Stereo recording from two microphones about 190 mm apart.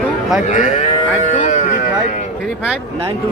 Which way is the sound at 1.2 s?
40° left (ahead or behind).